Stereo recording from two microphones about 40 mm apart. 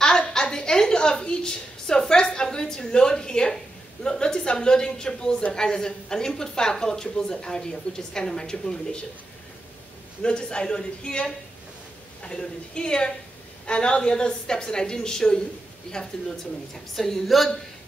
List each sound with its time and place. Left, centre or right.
0.0 s a sound: centre
4.0 s a woman's voice: centre
10.2 s a woman's voice: left; by 17.5 s centre